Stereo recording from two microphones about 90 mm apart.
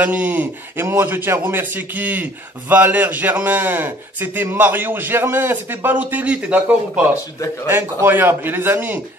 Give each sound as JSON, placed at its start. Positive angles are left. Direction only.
{"t": 0.0, "sound": "a man's voice", "side_deg": -20}